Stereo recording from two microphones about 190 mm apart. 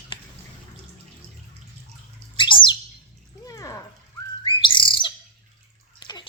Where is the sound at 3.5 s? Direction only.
15° left (ahead or behind).